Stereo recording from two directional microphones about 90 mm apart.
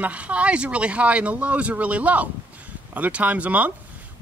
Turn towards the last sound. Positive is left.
turn(degrees=-15)  # may be behind; listen again after turning